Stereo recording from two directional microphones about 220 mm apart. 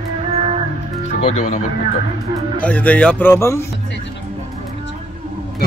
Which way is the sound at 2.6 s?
5° left (ahead or behind).